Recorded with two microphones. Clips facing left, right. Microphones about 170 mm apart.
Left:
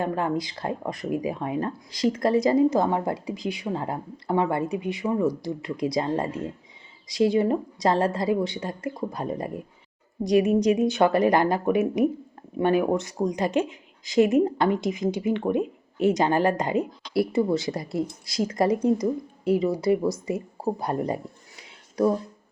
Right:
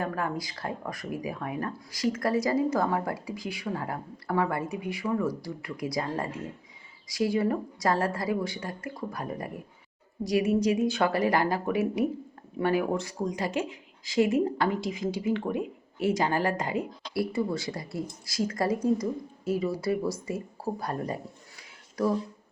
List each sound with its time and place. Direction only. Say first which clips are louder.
0.0 s a woman's voice: left 5 dB; 25° left (ahead or behind)